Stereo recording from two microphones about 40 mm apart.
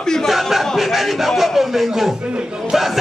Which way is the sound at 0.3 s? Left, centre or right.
Centre.